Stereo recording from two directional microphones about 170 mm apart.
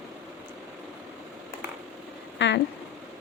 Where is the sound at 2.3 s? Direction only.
90° left.